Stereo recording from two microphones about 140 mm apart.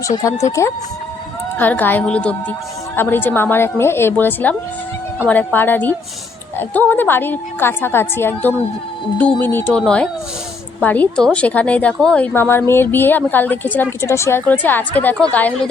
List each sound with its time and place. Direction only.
0.6 s a woman's voice: 20° left (ahead or behind)